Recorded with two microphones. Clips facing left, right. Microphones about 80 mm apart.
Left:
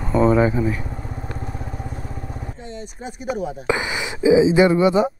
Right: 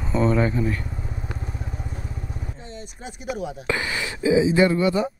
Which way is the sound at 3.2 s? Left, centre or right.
Centre.